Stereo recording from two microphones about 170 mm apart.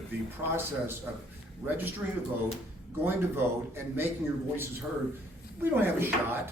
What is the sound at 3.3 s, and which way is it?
Speech, 15° right (ahead or behind).